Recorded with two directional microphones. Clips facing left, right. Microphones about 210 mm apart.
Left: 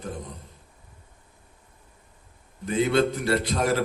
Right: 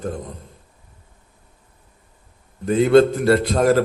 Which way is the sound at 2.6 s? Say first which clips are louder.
Right 9 dB; 50° right (ahead or behind).